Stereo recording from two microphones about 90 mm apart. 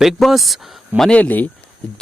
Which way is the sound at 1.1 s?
20° left (ahead or behind).